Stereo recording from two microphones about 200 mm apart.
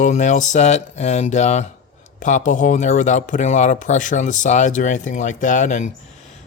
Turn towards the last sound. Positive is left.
turn(degrees=40)  # may be behind; listen again after turning